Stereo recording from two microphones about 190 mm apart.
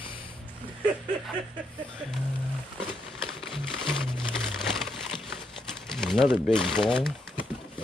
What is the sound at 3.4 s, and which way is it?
Music, centre (ahead or behind).